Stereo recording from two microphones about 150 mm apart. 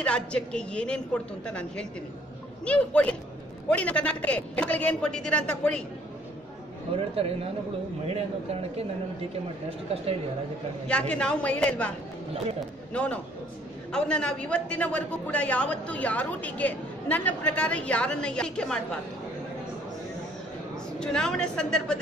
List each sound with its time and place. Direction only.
0.0 s a man's voice: 5° left (ahead or behind)
8.0 s a man's voice: 40° right (ahead or behind)
10.9 s a man's voice: 5° left (ahead or behind)
12.9 s a man's voice: 10° left (ahead or behind)
21.0 s speech: 5° left (ahead or behind)